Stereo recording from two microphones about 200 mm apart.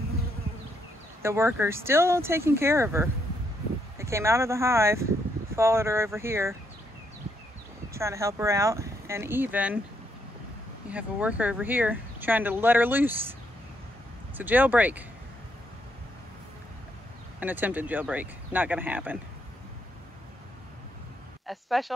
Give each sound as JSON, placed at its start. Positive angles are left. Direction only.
{"t": 1.2, "sound": "speech", "side_deg": -10}
{"t": 7.9, "sound": "speech", "side_deg": -15}
{"t": 10.9, "sound": "speech", "side_deg": -5}
{"t": 14.3, "sound": "speech", "side_deg": -10}
{"t": 17.4, "sound": "speech", "side_deg": -10}
{"t": 21.5, "sound": "speech", "side_deg": 0}